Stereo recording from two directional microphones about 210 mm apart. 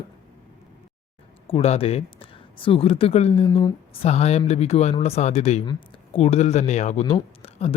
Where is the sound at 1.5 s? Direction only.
30° left (ahead or behind).